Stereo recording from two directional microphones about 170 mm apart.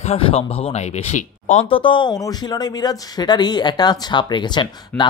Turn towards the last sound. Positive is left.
turn(degrees=10)  # may be behind; listen again after turning